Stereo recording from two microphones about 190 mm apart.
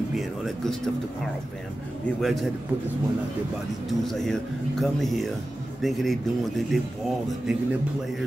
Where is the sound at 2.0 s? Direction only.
Centre (ahead or behind).